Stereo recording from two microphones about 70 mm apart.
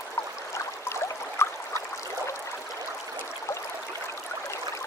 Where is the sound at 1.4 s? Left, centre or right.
Left.